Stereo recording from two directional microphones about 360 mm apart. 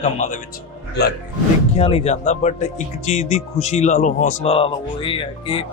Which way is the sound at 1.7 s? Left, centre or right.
Centre.